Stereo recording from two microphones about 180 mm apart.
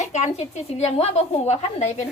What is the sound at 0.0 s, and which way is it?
A woman's voice, 40° left (ahead or behind).